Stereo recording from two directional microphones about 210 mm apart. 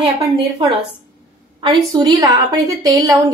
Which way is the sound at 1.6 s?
20° right (ahead or behind).